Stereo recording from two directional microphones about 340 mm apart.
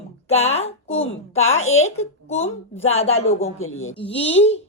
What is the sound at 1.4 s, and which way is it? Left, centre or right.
Speech, left.